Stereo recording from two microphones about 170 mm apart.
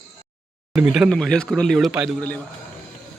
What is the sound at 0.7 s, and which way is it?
A man's voice, 5° right (ahead or behind).